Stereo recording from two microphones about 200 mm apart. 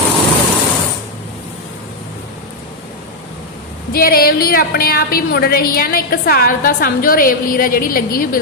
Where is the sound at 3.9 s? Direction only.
50° left (ahead or behind).